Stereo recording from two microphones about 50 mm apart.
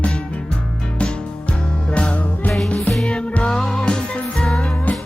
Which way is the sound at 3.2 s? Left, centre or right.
Left.